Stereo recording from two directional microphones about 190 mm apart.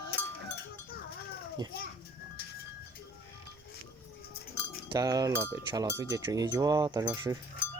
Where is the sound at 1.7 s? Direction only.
55° left (ahead or behind).